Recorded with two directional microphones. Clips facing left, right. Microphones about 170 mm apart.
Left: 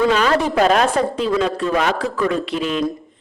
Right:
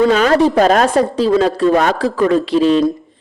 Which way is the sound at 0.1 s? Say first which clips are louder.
Right 5 dB; 40° right (ahead or behind).